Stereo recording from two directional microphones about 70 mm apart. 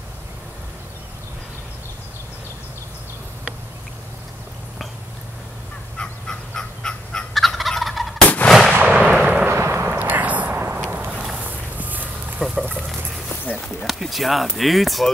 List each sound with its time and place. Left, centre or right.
5.9 s fowl: centre
7.3 s fowl: centre
8.5 s gunshot: centre
8.8 s artillery fire: centre
9.5 s a sound: right
12.4 s a sound: centre
13.6 s speech: centre